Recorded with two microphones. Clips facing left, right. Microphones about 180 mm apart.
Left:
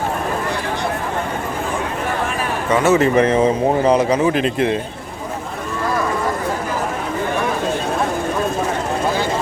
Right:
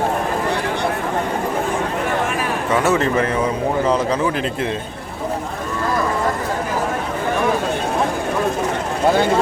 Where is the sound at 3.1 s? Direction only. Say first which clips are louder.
Left 5 dB; 20° left (ahead or behind).